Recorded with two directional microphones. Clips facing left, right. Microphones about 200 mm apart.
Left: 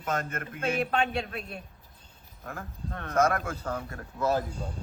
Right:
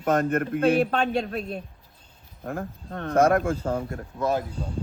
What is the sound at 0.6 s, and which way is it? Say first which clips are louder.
Speech: right 5 dB; 35° right (ahead or behind).